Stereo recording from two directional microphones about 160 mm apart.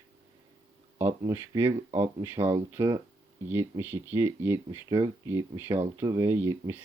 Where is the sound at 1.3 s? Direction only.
15° right (ahead or behind).